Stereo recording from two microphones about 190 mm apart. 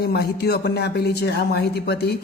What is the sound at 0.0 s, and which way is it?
A man's voice, 55° left (ahead or behind).